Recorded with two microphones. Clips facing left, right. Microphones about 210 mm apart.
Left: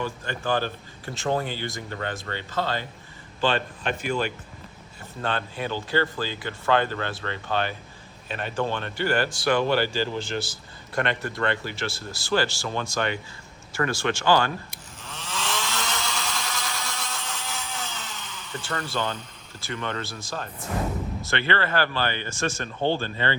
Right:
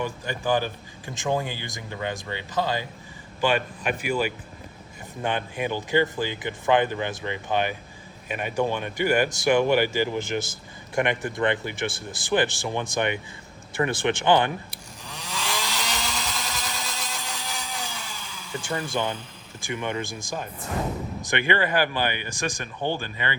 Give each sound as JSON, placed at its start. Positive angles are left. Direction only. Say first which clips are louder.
{"t": 0.0, "sound": "speech", "louder": "right 1 dB", "side_deg": -15}
{"t": 15.0, "sound": "chainsaw", "louder": "even", "side_deg": -15}
{"t": 15.5, "sound": "helicopter", "louder": "even", "side_deg": -15}
{"t": 16.0, "sound": "a sound", "louder": "even", "side_deg": 0}
{"t": 17.2, "sound": "a sound", "louder": "even", "side_deg": -15}
{"t": 21.2, "sound": "speech", "louder": "right 3 dB", "side_deg": -15}